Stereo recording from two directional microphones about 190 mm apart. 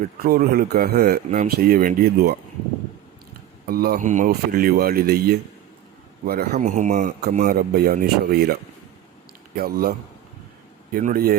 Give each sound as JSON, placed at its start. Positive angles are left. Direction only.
{"t": 0.2, "sound": "speech", "side_deg": -50}
{"t": 3.7, "sound": "speech", "side_deg": -50}
{"t": 6.5, "sound": "speech", "side_deg": -40}
{"t": 9.6, "sound": "speech", "side_deg": -55}
{"t": 10.9, "sound": "speech", "side_deg": -50}